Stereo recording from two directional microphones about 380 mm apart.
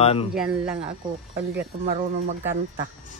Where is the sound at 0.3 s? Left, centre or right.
Centre.